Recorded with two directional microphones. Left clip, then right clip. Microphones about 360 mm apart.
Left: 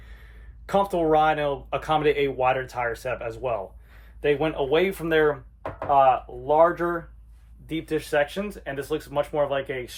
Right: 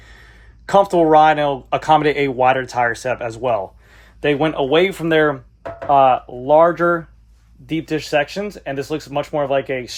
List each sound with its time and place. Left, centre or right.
0.6 s speech: right